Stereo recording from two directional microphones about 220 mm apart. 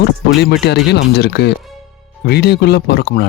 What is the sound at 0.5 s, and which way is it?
Speech, 50° left (ahead or behind).